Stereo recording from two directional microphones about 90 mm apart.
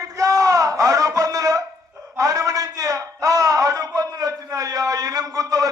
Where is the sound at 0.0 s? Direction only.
40° right (ahead or behind).